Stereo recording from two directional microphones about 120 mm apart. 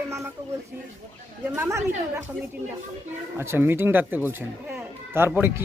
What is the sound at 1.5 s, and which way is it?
Speech, 20° right (ahead or behind).